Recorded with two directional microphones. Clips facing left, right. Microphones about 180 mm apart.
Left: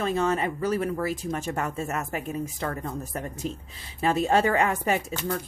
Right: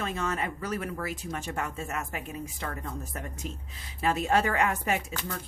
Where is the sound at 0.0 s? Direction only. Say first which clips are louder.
Left 7 dB; 35° left (ahead or behind).